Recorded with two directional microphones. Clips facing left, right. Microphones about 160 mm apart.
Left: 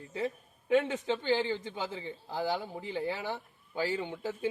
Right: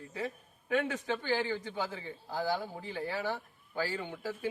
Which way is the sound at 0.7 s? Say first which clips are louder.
Left 4 dB; 25° left (ahead or behind).